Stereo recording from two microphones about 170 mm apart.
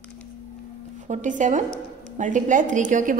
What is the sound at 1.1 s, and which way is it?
A woman's voice, 45° right (ahead or behind).